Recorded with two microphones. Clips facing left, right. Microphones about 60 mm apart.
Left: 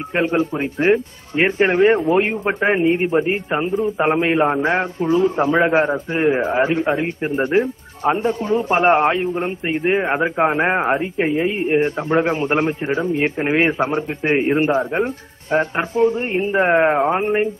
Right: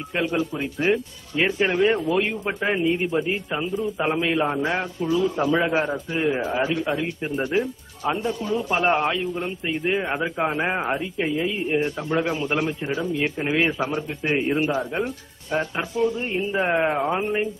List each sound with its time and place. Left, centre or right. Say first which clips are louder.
0.1 s a man's voice: left 6 dB; left